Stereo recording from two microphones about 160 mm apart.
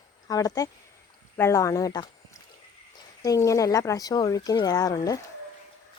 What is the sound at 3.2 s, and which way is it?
Speech, 20° left (ahead or behind).